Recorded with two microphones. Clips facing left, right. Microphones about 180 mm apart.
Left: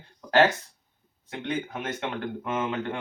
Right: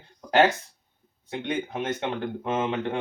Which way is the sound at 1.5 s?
25° right (ahead or behind).